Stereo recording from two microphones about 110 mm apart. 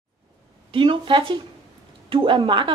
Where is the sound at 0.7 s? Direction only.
50° right (ahead or behind).